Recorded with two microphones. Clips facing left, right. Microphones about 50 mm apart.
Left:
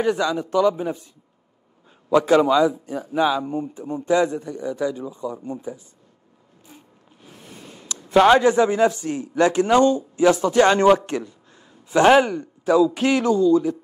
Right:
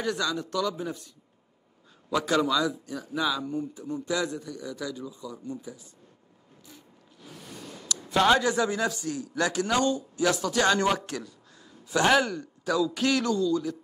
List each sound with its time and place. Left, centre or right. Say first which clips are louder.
0.0 s a man's voice: left 8 dB; left
7.5 s a man's voice: right 1 dB; left